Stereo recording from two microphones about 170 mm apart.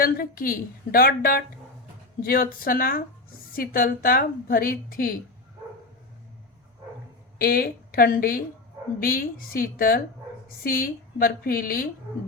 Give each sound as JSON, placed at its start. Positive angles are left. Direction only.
{"t": 0.0, "sound": "a woman's voice", "side_deg": 60}
{"t": 7.3, "sound": "a woman's voice", "side_deg": 60}